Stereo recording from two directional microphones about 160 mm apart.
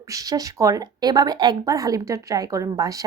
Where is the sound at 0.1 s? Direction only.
20° right (ahead or behind).